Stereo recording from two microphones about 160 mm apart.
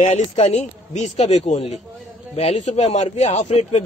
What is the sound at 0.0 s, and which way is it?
Speech, 45° left (ahead or behind).